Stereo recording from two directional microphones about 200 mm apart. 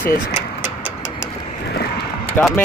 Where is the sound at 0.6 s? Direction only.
5° right (ahead or behind).